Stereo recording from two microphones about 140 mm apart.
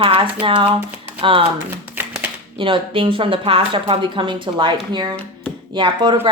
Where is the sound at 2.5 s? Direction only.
40° right (ahead or behind).